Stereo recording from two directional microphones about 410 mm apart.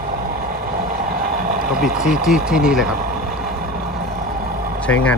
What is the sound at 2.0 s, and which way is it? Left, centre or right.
Speech, centre.